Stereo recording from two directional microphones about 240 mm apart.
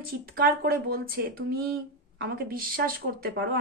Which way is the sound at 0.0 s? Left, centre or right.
Right.